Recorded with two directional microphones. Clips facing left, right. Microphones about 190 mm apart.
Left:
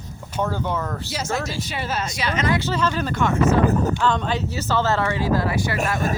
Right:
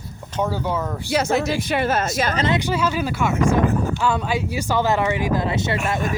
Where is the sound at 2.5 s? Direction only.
10° right (ahead or behind).